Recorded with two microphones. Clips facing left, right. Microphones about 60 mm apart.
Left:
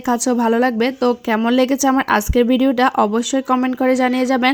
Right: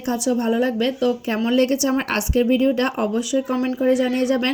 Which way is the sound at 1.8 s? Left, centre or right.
Left.